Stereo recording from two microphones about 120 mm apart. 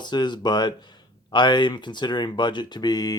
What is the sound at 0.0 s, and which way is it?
Speech, 40° left (ahead or behind).